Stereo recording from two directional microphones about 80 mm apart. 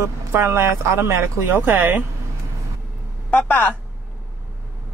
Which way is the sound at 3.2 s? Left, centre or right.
Centre.